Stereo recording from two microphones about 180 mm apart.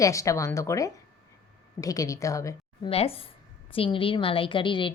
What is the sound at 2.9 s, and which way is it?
A woman's voice, 30° left (ahead or behind).